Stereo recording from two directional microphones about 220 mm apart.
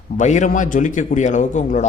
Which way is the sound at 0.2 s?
35° left (ahead or behind).